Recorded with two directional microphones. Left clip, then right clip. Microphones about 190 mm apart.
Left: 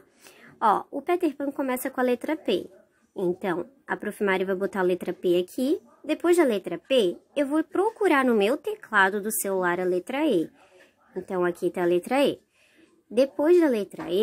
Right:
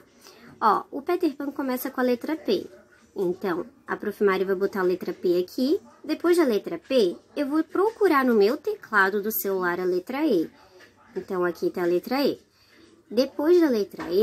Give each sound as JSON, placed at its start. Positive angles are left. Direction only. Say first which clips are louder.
{"t": 0.2, "sound": "speech", "louder": "right 1 dB", "side_deg": 35}